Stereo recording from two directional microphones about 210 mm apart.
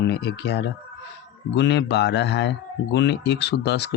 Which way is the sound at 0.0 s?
55° left (ahead or behind).